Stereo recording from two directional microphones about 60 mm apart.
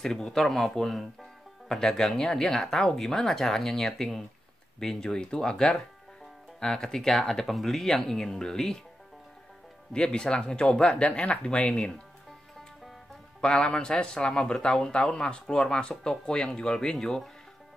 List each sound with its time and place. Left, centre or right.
0.0 s speech: centre
9.9 s speech: centre
13.4 s speech: centre